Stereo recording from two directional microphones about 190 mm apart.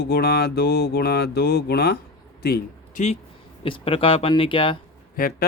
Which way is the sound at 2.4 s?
55° left (ahead or behind).